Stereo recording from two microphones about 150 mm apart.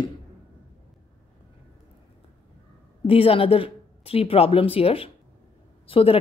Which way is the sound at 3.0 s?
40° left (ahead or behind).